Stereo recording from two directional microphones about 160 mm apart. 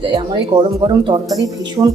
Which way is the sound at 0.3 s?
30° right (ahead or behind).